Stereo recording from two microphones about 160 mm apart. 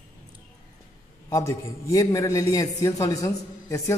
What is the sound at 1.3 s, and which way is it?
A man's voice, 20° left (ahead or behind).